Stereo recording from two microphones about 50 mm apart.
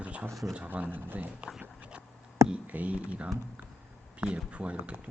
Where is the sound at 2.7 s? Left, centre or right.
Right.